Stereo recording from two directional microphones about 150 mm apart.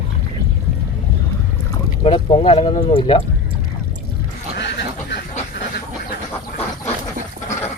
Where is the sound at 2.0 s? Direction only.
35° left (ahead or behind).